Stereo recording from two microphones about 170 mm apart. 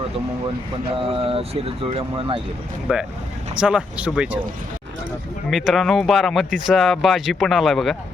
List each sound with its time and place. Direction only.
0.9 s speech: 35° right (ahead or behind)
2.9 s speech: 5° right (ahead or behind)
5.5 s speech: centre (ahead or behind)